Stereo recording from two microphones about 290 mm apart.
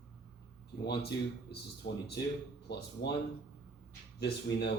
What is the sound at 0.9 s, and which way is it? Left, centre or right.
Speech, left.